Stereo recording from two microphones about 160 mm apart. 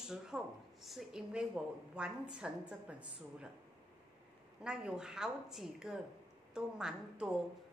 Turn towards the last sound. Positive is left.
turn(degrees=-5)  # may be behind; listen again after turning